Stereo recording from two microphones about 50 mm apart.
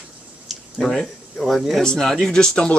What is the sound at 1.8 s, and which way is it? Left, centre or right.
Speech, centre.